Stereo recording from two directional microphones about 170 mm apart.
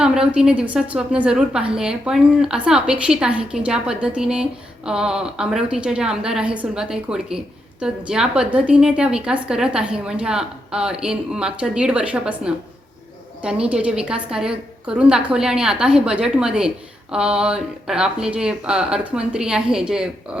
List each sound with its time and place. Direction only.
0.0 s a woman's voice: 5° right (ahead or behind)